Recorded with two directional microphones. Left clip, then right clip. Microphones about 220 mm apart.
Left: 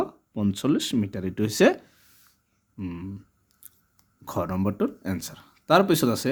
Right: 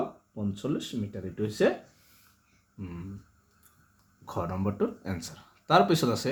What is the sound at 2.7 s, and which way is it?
Speech, 40° left (ahead or behind).